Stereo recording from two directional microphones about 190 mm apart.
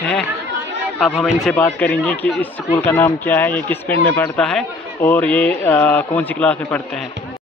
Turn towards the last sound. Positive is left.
turn(degrees=5)  # may be behind; listen again after turning